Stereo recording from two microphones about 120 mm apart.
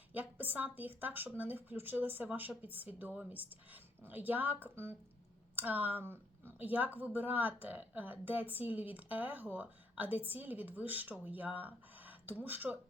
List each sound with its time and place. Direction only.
0.1 s speech: 15° right (ahead or behind)